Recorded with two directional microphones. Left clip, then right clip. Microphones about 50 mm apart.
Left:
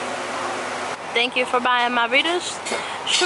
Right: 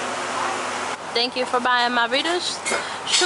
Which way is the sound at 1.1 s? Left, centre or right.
Right.